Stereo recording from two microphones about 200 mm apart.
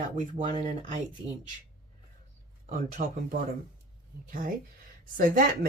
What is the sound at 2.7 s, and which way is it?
Speech, 40° right (ahead or behind).